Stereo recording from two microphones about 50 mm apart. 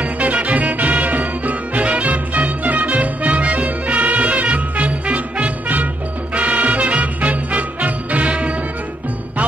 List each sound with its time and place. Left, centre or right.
0.0 s music: right